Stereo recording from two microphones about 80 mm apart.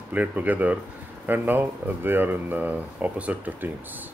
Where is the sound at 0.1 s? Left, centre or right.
Right.